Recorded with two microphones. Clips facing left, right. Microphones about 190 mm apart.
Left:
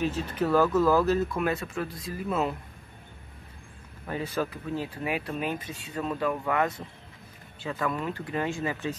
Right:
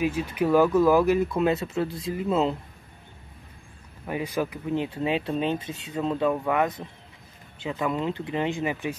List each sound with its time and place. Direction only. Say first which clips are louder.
0.0 s speech: right 3 dB; 10° right (ahead or behind)
4.1 s speech: right 2 dB; 15° right (ahead or behind)